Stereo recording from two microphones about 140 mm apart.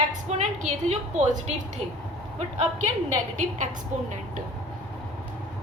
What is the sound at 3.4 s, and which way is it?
A woman's voice, 60° right (ahead or behind).